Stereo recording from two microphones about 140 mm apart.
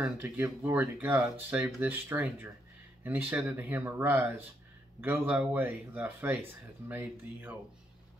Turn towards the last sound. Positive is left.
turn(degrees=-15)  # may be behind; listen again after turning